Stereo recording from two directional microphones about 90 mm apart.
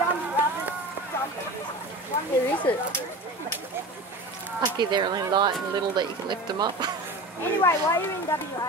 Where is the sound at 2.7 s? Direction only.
20° left (ahead or behind).